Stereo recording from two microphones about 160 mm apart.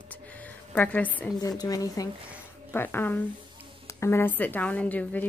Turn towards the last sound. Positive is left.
turn(degrees=10)  # may be behind; listen again after turning